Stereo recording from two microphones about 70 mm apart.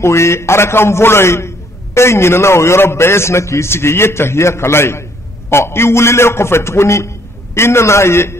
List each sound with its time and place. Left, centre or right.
0.0 s a man's voice: left